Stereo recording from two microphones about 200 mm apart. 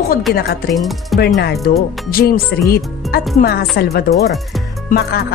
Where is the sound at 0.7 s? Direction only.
Centre (ahead or behind).